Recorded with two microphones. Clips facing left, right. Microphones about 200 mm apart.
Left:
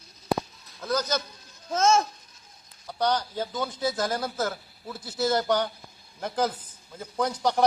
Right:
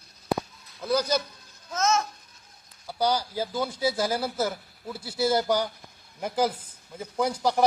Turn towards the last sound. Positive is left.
turn(degrees=-10)  # may be behind; listen again after turning